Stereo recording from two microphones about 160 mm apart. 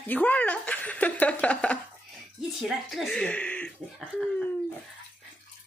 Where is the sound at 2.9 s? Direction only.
Centre (ahead or behind).